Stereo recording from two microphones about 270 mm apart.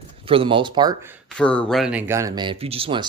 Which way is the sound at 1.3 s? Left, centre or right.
Centre.